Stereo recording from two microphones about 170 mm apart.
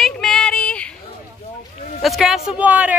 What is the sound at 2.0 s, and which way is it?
Speech, centre (ahead or behind).